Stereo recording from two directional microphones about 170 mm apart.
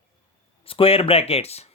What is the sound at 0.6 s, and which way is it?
Speech, 35° left (ahead or behind).